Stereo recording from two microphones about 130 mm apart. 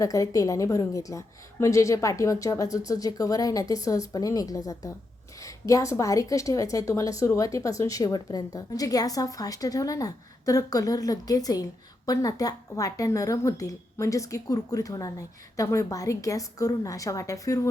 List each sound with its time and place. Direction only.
0.0 s a woman's voice: 25° left (ahead or behind)